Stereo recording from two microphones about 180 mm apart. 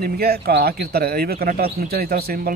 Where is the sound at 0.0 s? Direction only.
60° right (ahead or behind).